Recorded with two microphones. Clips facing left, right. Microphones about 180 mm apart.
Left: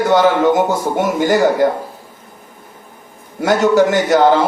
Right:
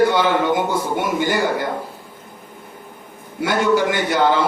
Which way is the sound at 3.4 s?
45° left (ahead or behind).